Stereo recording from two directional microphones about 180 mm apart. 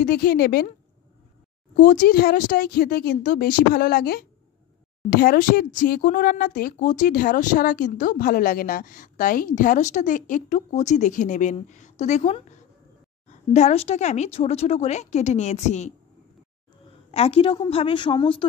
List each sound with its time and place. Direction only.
0.0 s a woman's voice: 55° left (ahead or behind)
1.8 s a woman's voice: 50° left (ahead or behind)
17.1 s a woman's voice: 35° left (ahead or behind)